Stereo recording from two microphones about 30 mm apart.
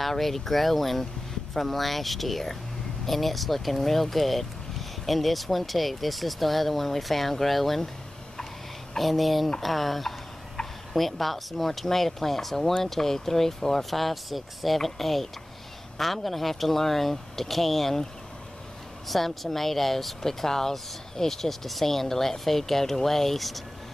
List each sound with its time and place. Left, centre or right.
0.0 s speech: centre
8.9 s speech: centre
19.0 s speech: centre